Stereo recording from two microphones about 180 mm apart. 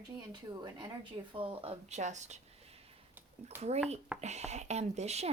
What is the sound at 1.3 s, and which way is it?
Speech, 30° right (ahead or behind).